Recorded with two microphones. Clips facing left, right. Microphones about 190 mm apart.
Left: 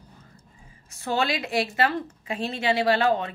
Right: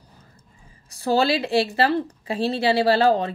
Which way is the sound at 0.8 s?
35° right (ahead or behind).